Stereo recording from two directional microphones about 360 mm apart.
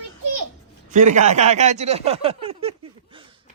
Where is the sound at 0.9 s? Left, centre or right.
Centre.